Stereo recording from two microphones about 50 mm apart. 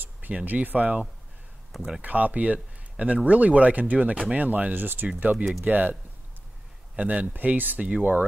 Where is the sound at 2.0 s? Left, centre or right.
Right.